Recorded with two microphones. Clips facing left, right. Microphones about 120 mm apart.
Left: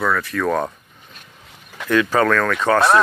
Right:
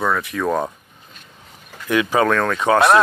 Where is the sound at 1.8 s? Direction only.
15° right (ahead or behind).